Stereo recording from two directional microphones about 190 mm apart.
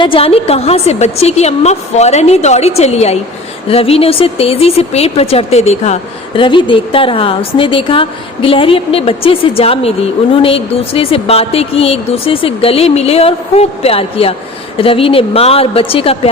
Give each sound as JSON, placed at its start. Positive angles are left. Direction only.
{"t": 0.0, "sound": "a woman's voice", "side_deg": 30}